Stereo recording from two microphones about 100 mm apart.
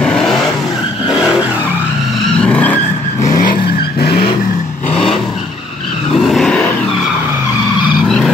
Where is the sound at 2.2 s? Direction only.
10° left (ahead or behind).